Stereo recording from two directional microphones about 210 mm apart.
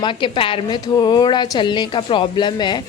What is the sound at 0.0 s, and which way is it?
A woman's voice, 25° left (ahead or behind).